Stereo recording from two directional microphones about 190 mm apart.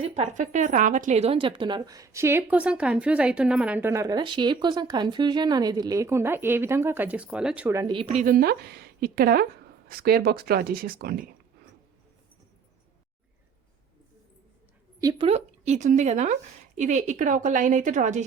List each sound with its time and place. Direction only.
0.0 s a woman's voice: 35° right (ahead or behind); by 7.9 s 15° right (ahead or behind)
7.9 s a woman's voice: 35° right (ahead or behind)
15.0 s speech: 30° right (ahead or behind)